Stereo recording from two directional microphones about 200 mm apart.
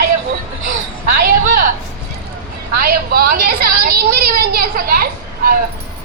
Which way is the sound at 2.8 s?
50° right (ahead or behind).